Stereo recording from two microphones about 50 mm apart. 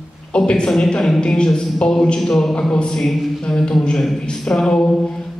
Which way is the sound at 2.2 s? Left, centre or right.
Centre.